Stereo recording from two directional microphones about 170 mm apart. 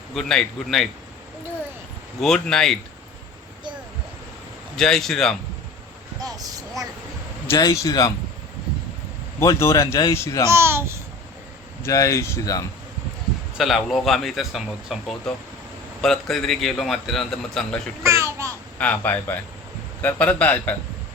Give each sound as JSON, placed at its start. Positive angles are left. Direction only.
{"t": 0.1, "sound": "a man's voice", "side_deg": 5}
{"t": 2.2, "sound": "a man's voice", "side_deg": 5}
{"t": 4.8, "sound": "a man's voice", "side_deg": 5}
{"t": 6.1, "sound": "vehicle", "side_deg": -20}
{"t": 7.4, "sound": "speech", "side_deg": 20}
{"t": 9.4, "sound": "speech", "side_deg": 15}
{"t": 10.5, "sound": "a child's voice", "side_deg": -15}
{"t": 11.8, "sound": "speech", "side_deg": 20}
{"t": 13.6, "sound": "a man's voice", "side_deg": 0}
{"t": 18.0, "sound": "a sound", "side_deg": -15}
{"t": 18.8, "sound": "speech", "side_deg": 10}